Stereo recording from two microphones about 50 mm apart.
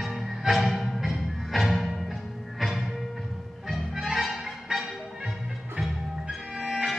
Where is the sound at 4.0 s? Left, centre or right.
Centre.